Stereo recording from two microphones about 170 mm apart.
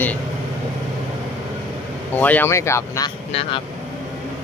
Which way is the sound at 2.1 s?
10° left (ahead or behind).